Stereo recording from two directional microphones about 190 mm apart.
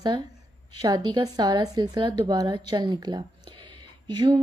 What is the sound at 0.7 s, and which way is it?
Speech, 20° right (ahead or behind).